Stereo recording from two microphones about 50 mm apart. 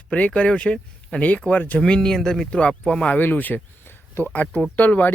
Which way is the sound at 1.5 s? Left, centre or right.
Left.